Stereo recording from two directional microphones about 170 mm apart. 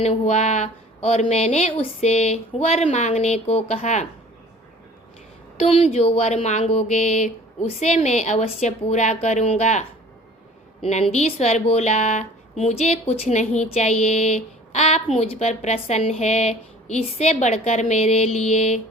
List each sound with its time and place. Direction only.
0.0 s a woman's voice: 40° left (ahead or behind)
5.5 s a woman's voice: 35° left (ahead or behind)